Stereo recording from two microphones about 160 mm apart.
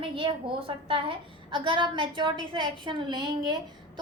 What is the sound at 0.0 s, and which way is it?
A woman's voice, 35° right (ahead or behind).